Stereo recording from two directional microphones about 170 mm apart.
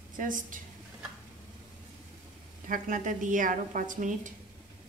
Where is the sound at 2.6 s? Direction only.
50° right (ahead or behind).